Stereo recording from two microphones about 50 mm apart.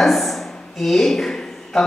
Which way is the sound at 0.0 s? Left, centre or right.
Centre.